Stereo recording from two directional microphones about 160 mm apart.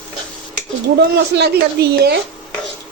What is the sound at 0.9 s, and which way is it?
A man's voice, 90° right.